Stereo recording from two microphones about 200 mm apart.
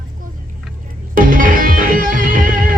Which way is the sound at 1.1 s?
45° right (ahead or behind).